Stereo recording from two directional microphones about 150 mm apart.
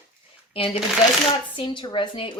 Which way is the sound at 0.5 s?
40° left (ahead or behind).